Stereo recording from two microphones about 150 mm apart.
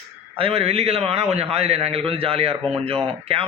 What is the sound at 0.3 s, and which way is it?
A man's voice, 40° right (ahead or behind).